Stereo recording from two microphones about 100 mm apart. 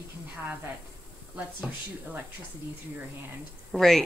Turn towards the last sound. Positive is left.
turn(degrees=5)  # may be behind; listen again after turning